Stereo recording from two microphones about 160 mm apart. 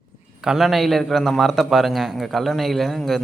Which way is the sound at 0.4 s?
Centre (ahead or behind).